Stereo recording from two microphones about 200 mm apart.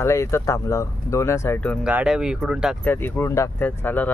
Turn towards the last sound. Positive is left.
turn(degrees=10)  # may be behind; listen again after turning